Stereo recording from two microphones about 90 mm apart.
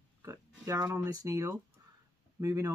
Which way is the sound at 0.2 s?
35° right (ahead or behind).